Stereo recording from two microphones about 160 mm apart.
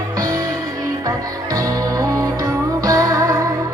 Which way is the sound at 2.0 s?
20° right (ahead or behind).